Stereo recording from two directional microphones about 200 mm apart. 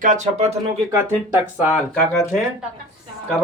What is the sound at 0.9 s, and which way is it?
Speech, 10° right (ahead or behind).